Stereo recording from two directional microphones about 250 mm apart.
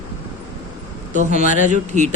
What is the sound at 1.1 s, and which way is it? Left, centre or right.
Speech, right.